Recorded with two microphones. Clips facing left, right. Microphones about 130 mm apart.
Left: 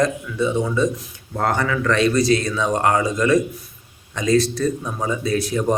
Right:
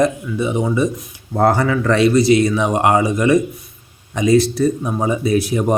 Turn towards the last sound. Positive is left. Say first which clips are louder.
# right 4 dB
turn(degrees=-25)  # may be behind; listen again after turning